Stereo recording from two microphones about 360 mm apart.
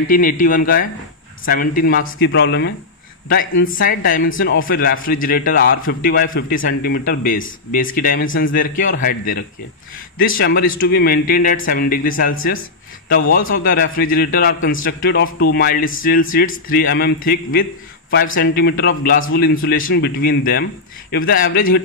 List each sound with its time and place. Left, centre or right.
0.1 s a man's voice: left